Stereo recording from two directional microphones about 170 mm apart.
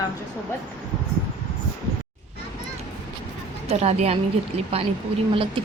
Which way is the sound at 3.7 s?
40° right (ahead or behind).